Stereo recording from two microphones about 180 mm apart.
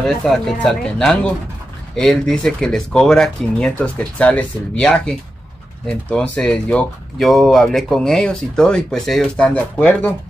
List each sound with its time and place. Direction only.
0.0 s speech: centre (ahead or behind)